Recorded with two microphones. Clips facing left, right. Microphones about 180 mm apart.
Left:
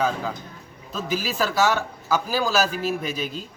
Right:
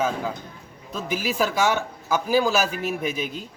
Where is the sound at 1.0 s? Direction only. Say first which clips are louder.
Right 1 dB; 15° right (ahead or behind).